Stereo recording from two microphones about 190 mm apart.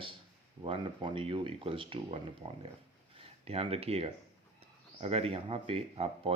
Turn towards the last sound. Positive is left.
turn(degrees=-30)  # may be behind; listen again after turning